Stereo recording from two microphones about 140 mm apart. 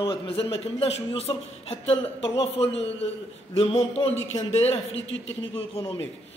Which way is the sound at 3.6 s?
45° left (ahead or behind).